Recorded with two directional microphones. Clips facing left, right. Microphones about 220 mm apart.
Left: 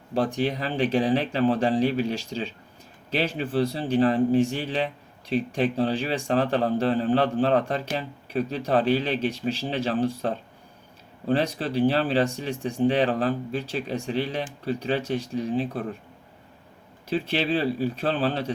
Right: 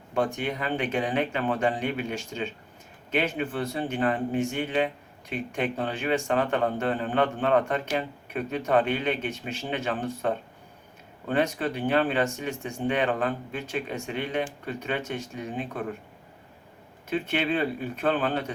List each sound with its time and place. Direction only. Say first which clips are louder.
0.1 s speech: left 3 dB; 35° left (ahead or behind)
11.3 s speech: even; 35° left (ahead or behind)
17.1 s speech: left 2 dB; 35° left (ahead or behind)